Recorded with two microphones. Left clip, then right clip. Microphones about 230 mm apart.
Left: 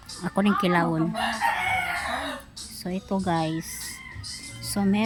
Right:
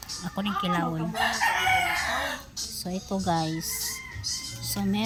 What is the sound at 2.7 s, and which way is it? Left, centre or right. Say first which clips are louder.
A woman's voice: left 4 dB; centre.